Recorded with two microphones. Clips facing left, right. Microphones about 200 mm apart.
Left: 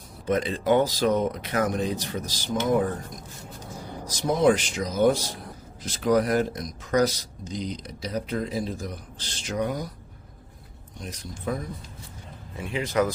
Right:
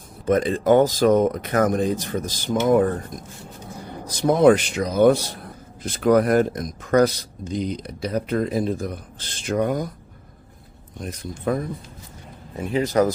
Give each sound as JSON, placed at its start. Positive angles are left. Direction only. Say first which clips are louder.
{"t": 0.3, "sound": "speech", "louder": "right 5 dB", "side_deg": -50}
{"t": 4.0, "sound": "a man's voice", "louder": "right 6 dB", "side_deg": -60}
{"t": 10.9, "sound": "a man's voice", "louder": "right 6 dB", "side_deg": -55}
{"t": 12.5, "sound": "speech", "louder": "right 5 dB", "side_deg": -40}